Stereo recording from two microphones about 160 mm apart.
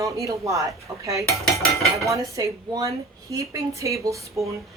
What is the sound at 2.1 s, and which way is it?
Speech, 20° right (ahead or behind).